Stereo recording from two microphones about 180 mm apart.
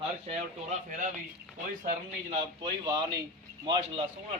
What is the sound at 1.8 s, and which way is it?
Speech, 45° right (ahead or behind).